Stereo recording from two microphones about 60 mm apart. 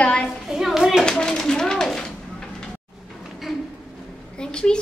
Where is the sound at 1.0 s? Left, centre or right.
Centre.